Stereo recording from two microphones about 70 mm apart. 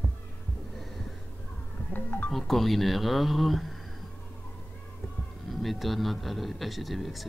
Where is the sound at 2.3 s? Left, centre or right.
Centre.